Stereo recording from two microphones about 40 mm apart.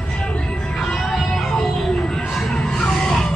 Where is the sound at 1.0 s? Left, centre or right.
Centre.